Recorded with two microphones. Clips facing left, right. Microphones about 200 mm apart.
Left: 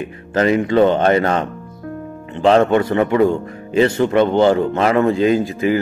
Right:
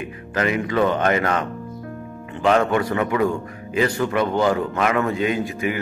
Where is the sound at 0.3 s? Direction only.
30° left (ahead or behind).